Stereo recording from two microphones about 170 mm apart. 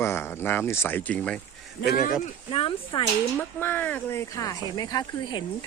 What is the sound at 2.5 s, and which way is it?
Speech, 30° left (ahead or behind).